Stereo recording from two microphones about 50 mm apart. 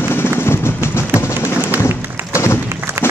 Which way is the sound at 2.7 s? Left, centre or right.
Right.